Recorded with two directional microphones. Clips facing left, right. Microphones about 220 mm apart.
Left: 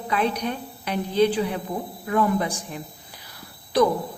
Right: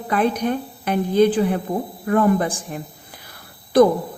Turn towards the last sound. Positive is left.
turn(degrees=-50)  # may be behind; listen again after turning